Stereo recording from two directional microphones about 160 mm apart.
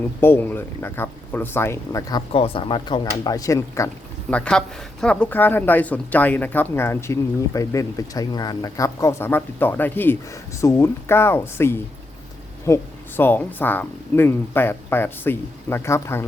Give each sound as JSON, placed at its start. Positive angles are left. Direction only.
{"t": 0.2, "sound": "speech", "side_deg": 15}
{"t": 2.3, "sound": "speech", "side_deg": 35}
{"t": 4.3, "sound": "speech", "side_deg": 5}